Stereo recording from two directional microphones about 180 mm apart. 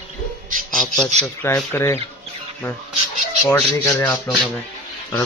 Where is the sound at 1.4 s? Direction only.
15° left (ahead or behind).